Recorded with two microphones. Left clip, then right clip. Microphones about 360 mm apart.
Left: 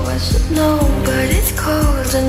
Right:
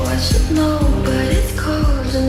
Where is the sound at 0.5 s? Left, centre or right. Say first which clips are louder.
Left 4 dB; centre.